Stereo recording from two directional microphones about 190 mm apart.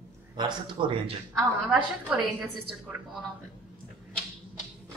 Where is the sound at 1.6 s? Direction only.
5° right (ahead or behind).